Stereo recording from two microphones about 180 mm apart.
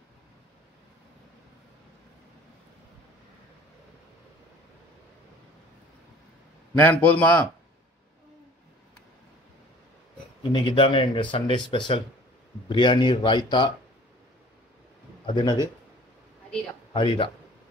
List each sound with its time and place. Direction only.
6.8 s a man's voice: 10° left (ahead or behind)
10.5 s speech: 30° left (ahead or behind)
15.2 s speech: 25° left (ahead or behind)
16.9 s speech: 25° left (ahead or behind)